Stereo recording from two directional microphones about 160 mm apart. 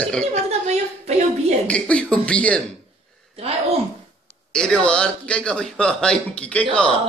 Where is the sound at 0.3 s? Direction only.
45° right (ahead or behind).